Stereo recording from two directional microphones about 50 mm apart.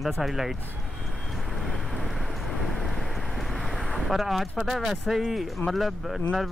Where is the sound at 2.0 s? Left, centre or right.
Centre.